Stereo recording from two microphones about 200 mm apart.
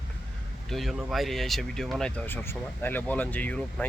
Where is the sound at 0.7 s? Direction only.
Centre (ahead or behind).